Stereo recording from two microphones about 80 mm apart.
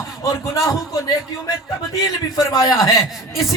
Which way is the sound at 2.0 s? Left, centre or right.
Left.